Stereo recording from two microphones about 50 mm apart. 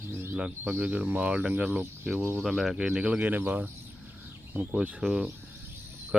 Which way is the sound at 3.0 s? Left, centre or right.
Right.